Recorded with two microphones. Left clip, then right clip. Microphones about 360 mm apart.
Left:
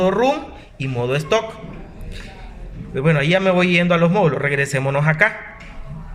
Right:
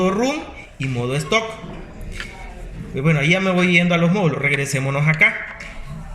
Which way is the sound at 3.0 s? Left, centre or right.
Left.